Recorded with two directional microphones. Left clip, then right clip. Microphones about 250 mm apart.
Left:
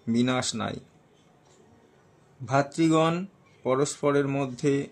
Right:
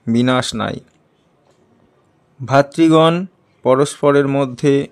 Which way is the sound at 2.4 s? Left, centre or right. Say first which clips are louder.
Right 12 dB; right.